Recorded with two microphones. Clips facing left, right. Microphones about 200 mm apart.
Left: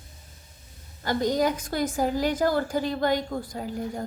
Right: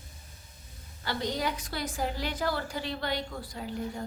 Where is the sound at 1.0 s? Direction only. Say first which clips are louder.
Left 8 dB; 45° left (ahead or behind).